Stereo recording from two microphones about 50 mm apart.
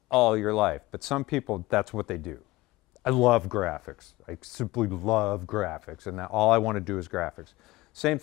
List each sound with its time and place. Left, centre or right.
0.1 s speech: centre